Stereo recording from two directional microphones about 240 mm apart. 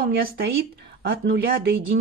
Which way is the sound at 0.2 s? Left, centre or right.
Right.